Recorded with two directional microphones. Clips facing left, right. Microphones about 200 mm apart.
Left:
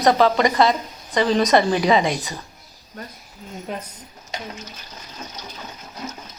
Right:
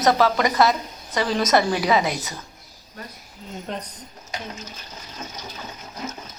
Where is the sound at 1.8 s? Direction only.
5° right (ahead or behind).